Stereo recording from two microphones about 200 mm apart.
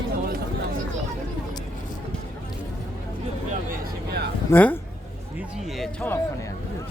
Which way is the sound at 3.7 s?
50° right (ahead or behind).